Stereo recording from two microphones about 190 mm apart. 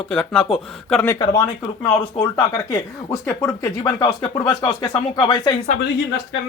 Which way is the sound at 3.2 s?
10° left (ahead or behind).